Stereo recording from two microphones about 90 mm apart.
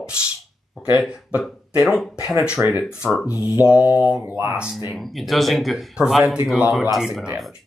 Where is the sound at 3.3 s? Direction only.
20° right (ahead or behind).